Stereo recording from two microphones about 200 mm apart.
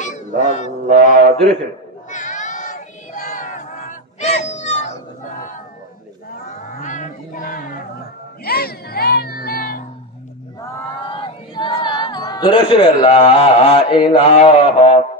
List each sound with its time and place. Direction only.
0.0 s honk: 40° left (ahead or behind)
1.3 s a man's voice: 5° left (ahead or behind)
2.0 s cat: 40° left (ahead or behind)
6.4 s a sound: 40° left (ahead or behind)
8.5 s music: 50° left (ahead or behind)
10.6 s a sound: 25° left (ahead or behind)